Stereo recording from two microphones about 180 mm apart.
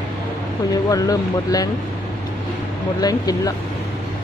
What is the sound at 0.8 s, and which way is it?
Speech, 20° left (ahead or behind).